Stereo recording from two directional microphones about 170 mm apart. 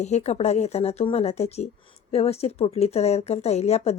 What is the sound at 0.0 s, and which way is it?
A woman's voice, 40° left (ahead or behind).